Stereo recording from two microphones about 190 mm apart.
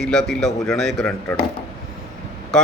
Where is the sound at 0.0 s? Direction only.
Centre (ahead or behind).